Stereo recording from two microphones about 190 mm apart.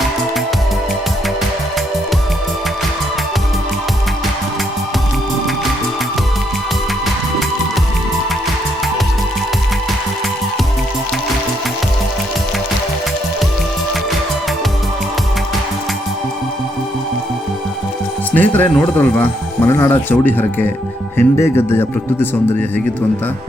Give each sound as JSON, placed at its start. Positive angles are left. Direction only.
{"t": 18.3, "sound": "speech", "side_deg": 10}